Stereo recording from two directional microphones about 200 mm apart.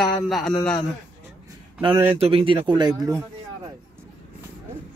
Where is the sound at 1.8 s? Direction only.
25° right (ahead or behind).